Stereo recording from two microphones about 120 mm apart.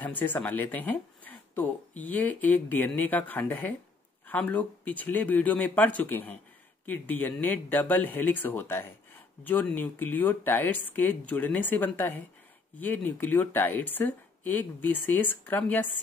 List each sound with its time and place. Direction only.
0.0 s speech: 15° left (ahead or behind)